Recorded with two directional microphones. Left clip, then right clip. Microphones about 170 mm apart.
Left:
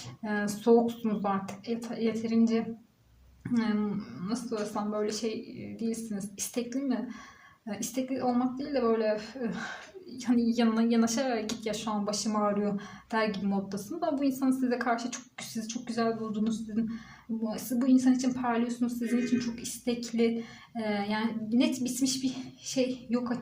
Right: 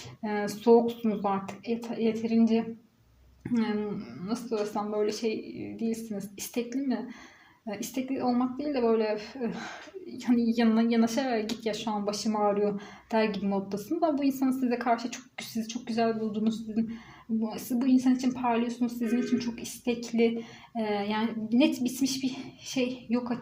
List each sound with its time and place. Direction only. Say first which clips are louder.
0.3 s a woman's voice: right 2 dB; 20° right (ahead or behind)